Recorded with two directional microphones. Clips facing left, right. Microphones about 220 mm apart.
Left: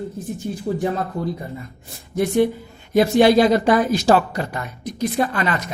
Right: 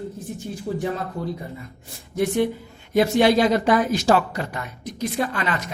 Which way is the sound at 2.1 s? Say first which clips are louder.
Left 3 dB; 40° left (ahead or behind).